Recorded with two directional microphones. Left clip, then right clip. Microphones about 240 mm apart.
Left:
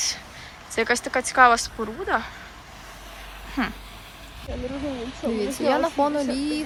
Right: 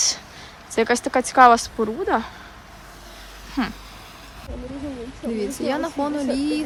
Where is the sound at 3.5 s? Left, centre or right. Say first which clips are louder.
Right 1 dB; centre.